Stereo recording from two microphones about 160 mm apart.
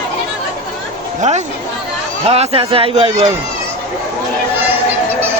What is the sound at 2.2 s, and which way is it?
A man's voice, 40° right (ahead or behind).